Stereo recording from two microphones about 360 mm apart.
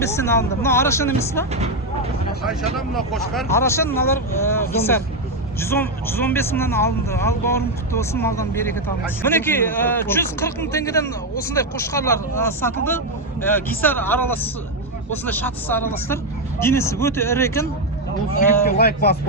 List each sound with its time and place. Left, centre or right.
0.0 s speech: centre
18.6 s a man's voice: left